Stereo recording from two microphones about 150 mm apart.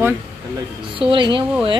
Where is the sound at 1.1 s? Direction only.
35° right (ahead or behind).